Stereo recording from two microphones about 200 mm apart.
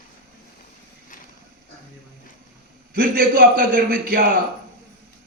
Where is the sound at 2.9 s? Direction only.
50° right (ahead or behind).